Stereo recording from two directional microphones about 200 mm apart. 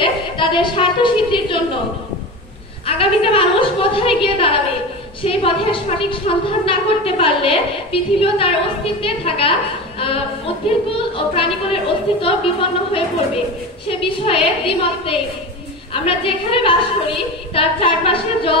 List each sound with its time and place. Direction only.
0.0 s a woman's voice: 25° left (ahead or behind)
3.0 s a woman's voice: 25° left (ahead or behind)